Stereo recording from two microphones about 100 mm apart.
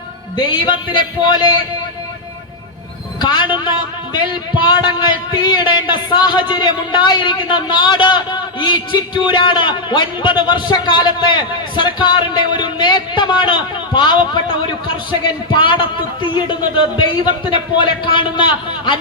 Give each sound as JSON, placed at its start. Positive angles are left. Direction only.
{"t": 0.3, "sound": "speech", "side_deg": 50}
{"t": 3.2, "sound": "speech", "side_deg": 50}